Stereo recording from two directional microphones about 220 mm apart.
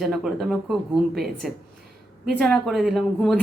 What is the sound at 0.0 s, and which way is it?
Speech, centre (ahead or behind).